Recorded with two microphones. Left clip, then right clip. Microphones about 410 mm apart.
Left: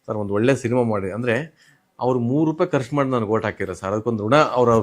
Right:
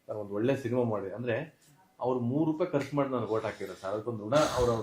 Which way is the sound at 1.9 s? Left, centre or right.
Left.